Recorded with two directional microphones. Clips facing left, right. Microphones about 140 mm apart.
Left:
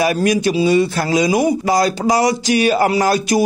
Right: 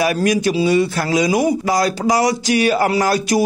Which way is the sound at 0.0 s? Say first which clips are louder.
Left 1 dB; 25° left (ahead or behind).